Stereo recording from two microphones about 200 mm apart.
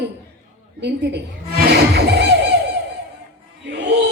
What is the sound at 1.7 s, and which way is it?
Music, 55° right (ahead or behind).